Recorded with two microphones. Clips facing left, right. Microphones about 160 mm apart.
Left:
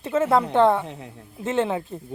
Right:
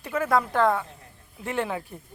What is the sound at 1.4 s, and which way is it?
Speech, 25° left (ahead or behind).